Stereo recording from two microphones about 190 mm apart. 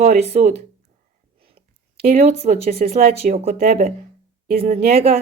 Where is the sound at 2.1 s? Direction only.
35° right (ahead or behind).